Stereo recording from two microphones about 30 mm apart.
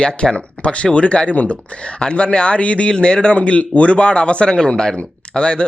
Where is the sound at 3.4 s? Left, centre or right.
Left.